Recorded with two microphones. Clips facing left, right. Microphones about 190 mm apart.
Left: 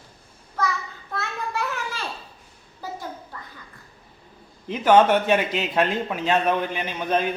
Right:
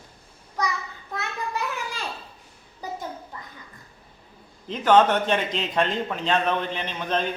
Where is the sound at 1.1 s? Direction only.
15° right (ahead or behind).